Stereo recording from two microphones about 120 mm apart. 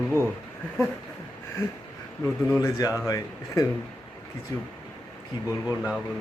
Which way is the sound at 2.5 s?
30° left (ahead or behind).